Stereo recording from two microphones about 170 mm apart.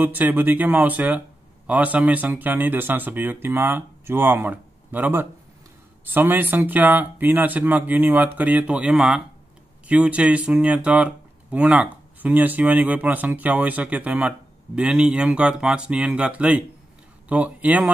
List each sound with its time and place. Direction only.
0.0 s speech: 10° right (ahead or behind)